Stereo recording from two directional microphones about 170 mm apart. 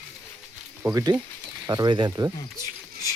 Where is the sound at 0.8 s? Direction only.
15° right (ahead or behind).